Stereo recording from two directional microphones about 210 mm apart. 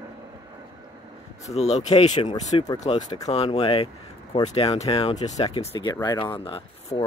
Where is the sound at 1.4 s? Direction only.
30° left (ahead or behind).